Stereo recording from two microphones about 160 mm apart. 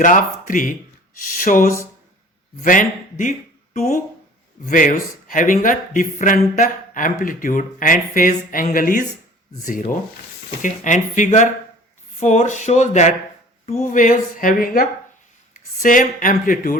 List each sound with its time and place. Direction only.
0.0 s speech: 55° left (ahead or behind)